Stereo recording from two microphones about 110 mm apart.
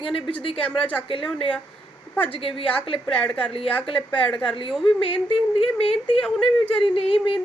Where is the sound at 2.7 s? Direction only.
55° left (ahead or behind).